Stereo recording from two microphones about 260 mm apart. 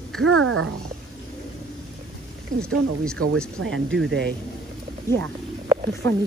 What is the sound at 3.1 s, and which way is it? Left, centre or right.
Speech, right.